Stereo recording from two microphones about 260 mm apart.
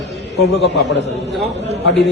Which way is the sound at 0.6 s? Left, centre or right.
Left.